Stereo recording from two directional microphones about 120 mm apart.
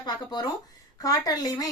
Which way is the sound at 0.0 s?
35° left (ahead or behind).